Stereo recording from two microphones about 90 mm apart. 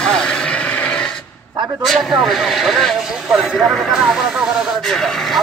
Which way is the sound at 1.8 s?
Centre (ahead or behind).